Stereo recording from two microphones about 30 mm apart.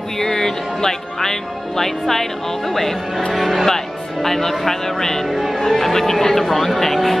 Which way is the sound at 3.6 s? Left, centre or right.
Centre.